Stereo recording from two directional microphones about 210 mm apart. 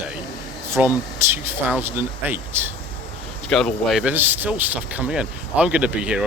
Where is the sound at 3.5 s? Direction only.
Centre (ahead or behind).